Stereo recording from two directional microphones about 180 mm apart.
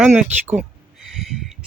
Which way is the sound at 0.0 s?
10° right (ahead or behind).